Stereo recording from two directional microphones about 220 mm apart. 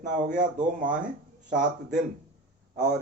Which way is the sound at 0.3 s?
35° right (ahead or behind).